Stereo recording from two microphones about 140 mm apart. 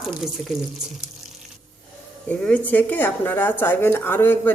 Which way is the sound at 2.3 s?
10° left (ahead or behind).